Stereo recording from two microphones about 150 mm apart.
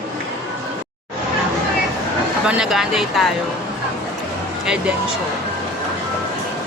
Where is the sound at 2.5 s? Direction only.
5° right (ahead or behind).